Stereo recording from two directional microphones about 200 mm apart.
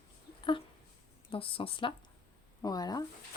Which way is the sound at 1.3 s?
25° left (ahead or behind).